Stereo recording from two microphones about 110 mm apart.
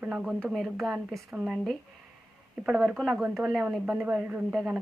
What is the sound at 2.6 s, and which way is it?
A woman's voice, 10° right (ahead or behind).